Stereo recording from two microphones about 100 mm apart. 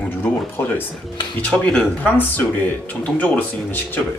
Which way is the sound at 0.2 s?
20° left (ahead or behind).